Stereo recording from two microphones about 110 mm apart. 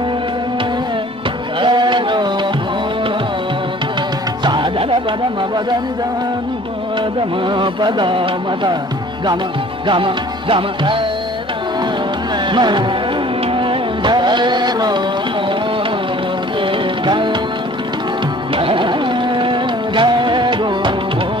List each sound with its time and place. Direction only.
1.6 s a sound: 45° right (ahead or behind)
4.5 s music: 50° right (ahead or behind)
7.4 s music: 45° right (ahead or behind)
9.8 s music: 50° right (ahead or behind)
12.4 s music: 45° right (ahead or behind)
17.0 s music: 45° right (ahead or behind)
18.6 s music: 50° right (ahead or behind)